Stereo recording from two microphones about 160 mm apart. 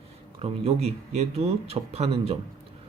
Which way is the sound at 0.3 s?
40° right (ahead or behind).